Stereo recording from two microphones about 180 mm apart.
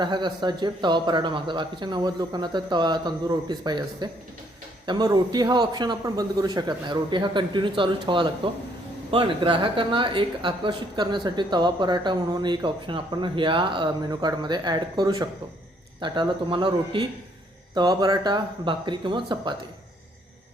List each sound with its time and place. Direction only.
0.0 s a woman's voice: 25° right (ahead or behind)